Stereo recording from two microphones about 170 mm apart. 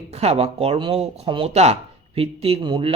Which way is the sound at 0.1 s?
40° right (ahead or behind).